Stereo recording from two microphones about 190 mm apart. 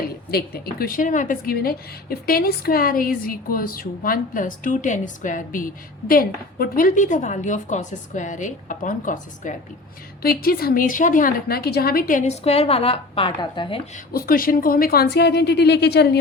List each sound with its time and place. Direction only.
0.3 s a woman's voice: 55° left (ahead or behind); by 14.0 s 30° left (ahead or behind)
14.1 s a woman's voice: 50° left (ahead or behind)